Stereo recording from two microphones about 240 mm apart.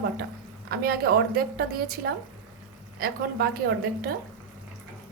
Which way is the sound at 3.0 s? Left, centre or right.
Right.